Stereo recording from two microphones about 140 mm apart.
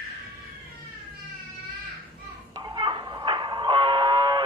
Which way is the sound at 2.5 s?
30° right (ahead or behind).